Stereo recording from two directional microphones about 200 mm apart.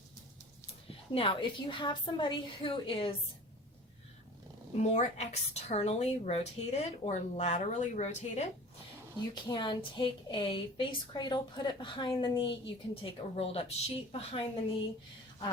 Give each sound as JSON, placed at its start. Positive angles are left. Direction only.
{"t": 0.9, "sound": "a woman's voice", "side_deg": 25}
{"t": 4.8, "sound": "speech", "side_deg": 35}
{"t": 9.3, "sound": "a woman's voice", "side_deg": 20}